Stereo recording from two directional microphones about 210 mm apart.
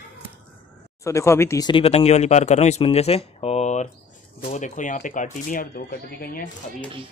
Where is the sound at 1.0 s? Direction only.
15° left (ahead or behind); by 6.4 s 45° left (ahead or behind).